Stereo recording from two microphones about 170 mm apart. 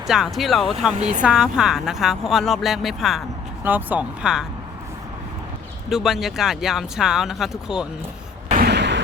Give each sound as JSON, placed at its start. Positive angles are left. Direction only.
{"t": 0.1, "sound": "a woman's voice", "side_deg": 0}
{"t": 5.9, "sound": "a woman's voice", "side_deg": 0}
{"t": 8.5, "sound": "a sound", "side_deg": -75}